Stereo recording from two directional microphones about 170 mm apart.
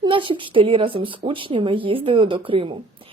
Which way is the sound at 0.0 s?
30° right (ahead or behind).